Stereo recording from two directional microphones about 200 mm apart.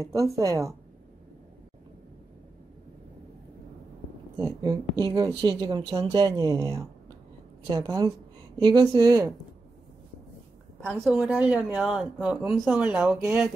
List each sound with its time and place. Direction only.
0.0 s a woman's voice: 15° right (ahead or behind)
4.4 s a woman's voice: 20° right (ahead or behind)
10.8 s speech: 10° right (ahead or behind)